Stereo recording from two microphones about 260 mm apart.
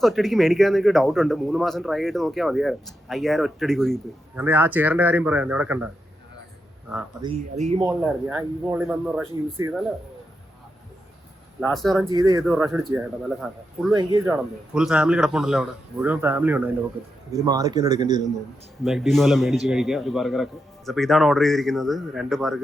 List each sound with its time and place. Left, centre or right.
0.0 s a man's voice: centre
7.2 s speech: right
7.9 s speech: centre
11.7 s a man's voice: centre
12.1 s speech: centre
13.9 s speech: centre
14.7 s a man's voice: centre
18.8 s a man's voice: centre